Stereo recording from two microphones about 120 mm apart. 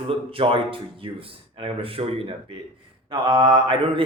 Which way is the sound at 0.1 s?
50° right (ahead or behind).